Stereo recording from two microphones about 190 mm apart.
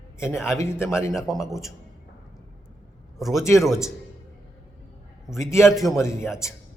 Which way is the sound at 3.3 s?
15° left (ahead or behind).